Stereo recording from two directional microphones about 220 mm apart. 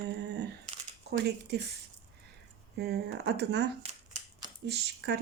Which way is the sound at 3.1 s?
50° right (ahead or behind).